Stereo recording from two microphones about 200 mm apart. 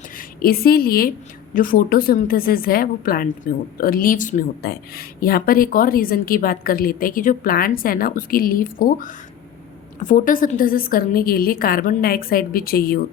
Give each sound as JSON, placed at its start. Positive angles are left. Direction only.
{"t": 0.2, "sound": "a woman's voice", "side_deg": 50}